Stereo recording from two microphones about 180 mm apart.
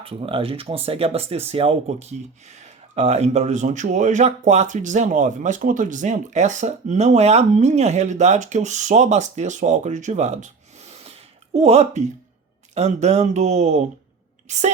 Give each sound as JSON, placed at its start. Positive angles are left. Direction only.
{"t": 0.0, "sound": "speech", "side_deg": -30}